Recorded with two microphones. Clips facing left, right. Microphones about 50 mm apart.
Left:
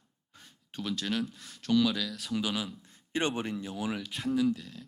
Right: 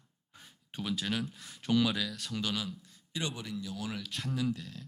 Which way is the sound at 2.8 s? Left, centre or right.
Left.